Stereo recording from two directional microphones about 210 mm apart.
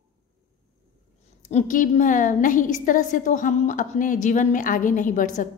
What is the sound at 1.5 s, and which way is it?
A woman's voice, 35° left (ahead or behind).